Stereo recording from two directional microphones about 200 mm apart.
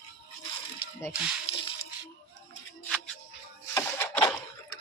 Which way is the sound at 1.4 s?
25° left (ahead or behind).